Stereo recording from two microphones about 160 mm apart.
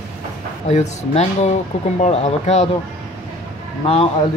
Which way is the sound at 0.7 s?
45° left (ahead or behind).